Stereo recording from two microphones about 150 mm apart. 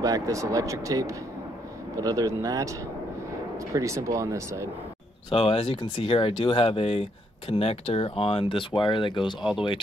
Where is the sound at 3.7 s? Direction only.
20° right (ahead or behind).